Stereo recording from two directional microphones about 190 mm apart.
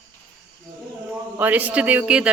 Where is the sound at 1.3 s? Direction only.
10° right (ahead or behind).